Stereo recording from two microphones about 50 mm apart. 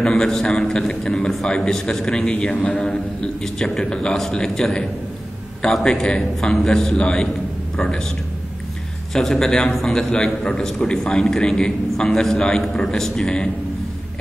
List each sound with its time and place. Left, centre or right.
0.0 s a man's voice: centre
9.1 s a man's voice: centre